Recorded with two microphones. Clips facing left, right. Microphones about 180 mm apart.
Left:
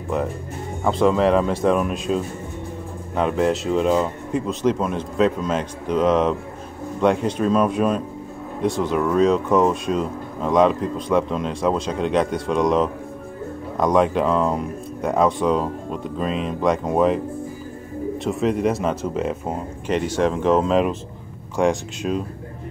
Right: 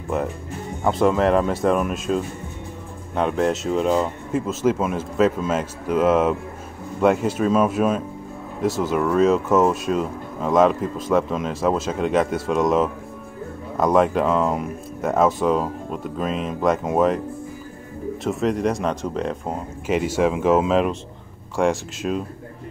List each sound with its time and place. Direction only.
0.1 s speech: centre (ahead or behind)
19.9 s speech: 5° right (ahead or behind)